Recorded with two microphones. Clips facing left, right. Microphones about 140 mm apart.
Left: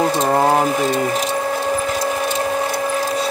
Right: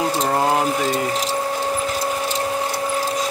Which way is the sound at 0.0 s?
50° left (ahead or behind).